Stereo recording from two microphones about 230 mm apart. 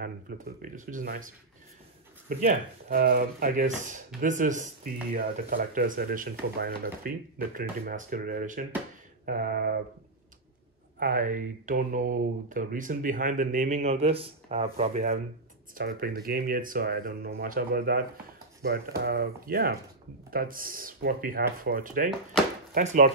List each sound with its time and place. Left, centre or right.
0.6 s speech: right
11.0 s speech: right
15.7 s speech: right
22.3 s speech: centre
22.8 s speech: right